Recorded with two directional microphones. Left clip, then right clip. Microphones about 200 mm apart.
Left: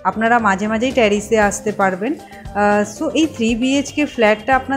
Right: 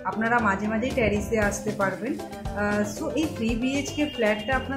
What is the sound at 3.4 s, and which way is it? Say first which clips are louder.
Speech: left 9 dB; 35° left (ahead or behind).